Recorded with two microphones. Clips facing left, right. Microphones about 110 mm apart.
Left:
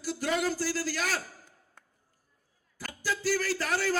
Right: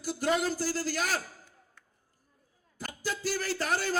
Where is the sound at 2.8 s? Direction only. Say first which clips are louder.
Left 1 dB; 25° right (ahead or behind).